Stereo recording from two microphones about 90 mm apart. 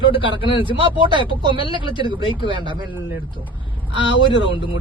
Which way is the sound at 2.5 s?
65° right (ahead or behind).